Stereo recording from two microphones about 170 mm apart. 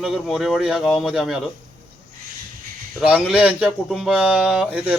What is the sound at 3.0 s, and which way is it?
Speech, 5° right (ahead or behind).